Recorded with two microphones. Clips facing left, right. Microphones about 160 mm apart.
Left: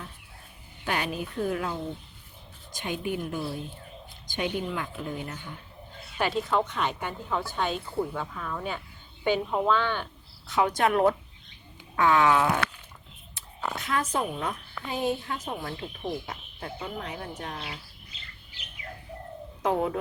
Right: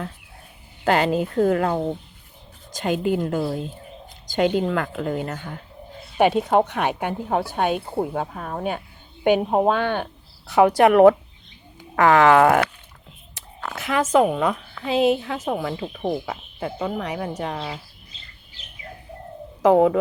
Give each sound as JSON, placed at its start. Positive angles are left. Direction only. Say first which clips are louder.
{"t": 0.9, "sound": "speech", "louder": "right 11 dB", "side_deg": -90}
{"t": 2.7, "sound": "speech", "louder": "right 9 dB", "side_deg": -90}
{"t": 6.1, "sound": "a woman's voice", "louder": "right 9 dB", "side_deg": -60}
{"t": 7.9, "sound": "a woman's voice", "louder": "right 6 dB", "side_deg": -45}
{"t": 13.7, "sound": "speech", "louder": "right 11 dB", "side_deg": -90}
{"t": 19.6, "sound": "speech", "louder": "right 11 dB", "side_deg": -70}